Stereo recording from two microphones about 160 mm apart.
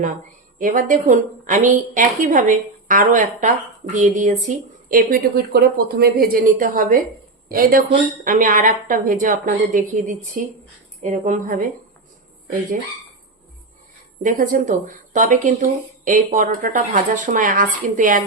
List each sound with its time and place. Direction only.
0.6 s a woman's voice: 55° right (ahead or behind)
14.2 s a woman's voice: 55° right (ahead or behind)